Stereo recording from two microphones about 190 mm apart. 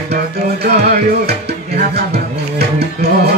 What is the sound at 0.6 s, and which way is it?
Music, 55° right (ahead or behind).